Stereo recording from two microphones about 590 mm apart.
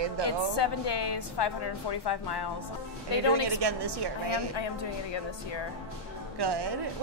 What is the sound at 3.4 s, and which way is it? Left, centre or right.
Speech, right.